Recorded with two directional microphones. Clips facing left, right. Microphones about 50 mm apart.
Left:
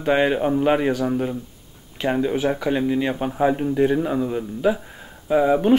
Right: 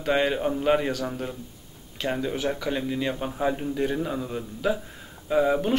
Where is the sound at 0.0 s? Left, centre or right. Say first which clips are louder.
Left 5 dB; centre.